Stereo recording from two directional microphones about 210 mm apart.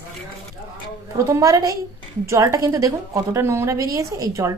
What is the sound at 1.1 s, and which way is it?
A woman's voice, 15° right (ahead or behind).